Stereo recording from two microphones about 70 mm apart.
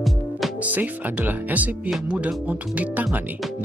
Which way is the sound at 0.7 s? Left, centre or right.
Right.